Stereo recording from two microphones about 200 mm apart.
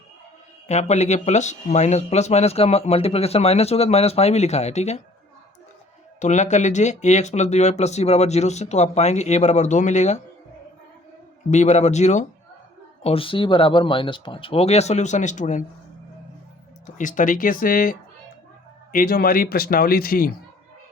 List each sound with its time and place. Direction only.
0.7 s speech: 35° left (ahead or behind)
6.1 s speech: 35° left (ahead or behind)
11.5 s speech: 35° left (ahead or behind)
16.8 s speech: 40° left (ahead or behind)